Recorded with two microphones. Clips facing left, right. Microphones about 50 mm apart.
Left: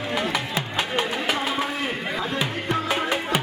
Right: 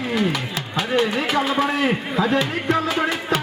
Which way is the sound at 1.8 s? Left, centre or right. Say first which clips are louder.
Right 6 dB; right.